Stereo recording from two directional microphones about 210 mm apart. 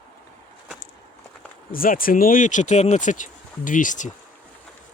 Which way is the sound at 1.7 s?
45° left (ahead or behind).